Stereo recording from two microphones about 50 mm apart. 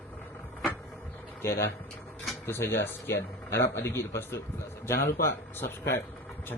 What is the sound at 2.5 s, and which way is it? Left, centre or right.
Speech, left.